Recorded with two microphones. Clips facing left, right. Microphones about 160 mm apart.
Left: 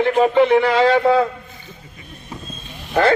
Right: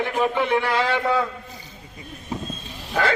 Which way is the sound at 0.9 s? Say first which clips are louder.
Left 7 dB; 40° left (ahead or behind).